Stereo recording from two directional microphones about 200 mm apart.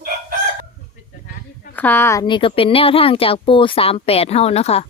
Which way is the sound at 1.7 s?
10° left (ahead or behind).